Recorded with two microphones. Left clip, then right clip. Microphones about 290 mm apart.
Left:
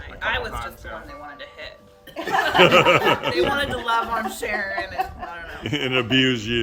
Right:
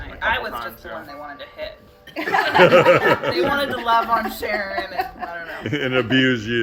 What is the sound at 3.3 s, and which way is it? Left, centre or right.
A man's voice, centre.